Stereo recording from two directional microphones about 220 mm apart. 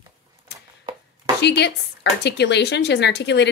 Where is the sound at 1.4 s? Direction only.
50° left (ahead or behind).